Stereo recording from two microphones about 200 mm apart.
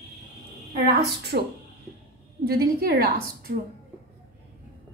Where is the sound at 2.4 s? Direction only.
50° right (ahead or behind).